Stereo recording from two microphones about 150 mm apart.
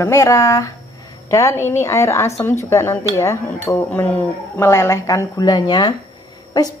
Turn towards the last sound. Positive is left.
turn(degrees=25)  # may be behind; listen again after turning